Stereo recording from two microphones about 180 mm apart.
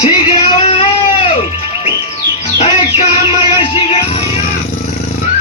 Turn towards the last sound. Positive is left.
turn(degrees=25)  # may be behind; listen again after turning